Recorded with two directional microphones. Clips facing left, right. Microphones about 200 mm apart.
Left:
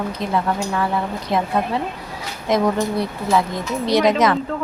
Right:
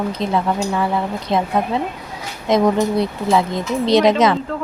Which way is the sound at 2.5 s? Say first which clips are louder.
Right 3 dB; 20° right (ahead or behind).